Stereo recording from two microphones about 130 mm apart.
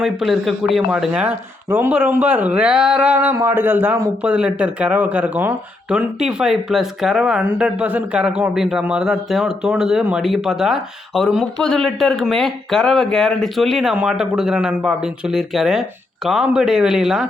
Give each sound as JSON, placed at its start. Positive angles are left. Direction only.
{"t": 0.0, "sound": "speech", "side_deg": 0}